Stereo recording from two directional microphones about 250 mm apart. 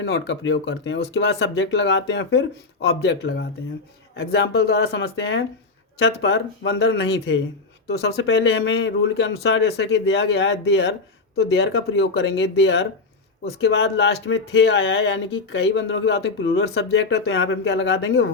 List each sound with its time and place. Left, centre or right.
0.0 s speech: left